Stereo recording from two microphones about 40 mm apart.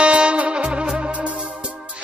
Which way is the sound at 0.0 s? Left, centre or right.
Right.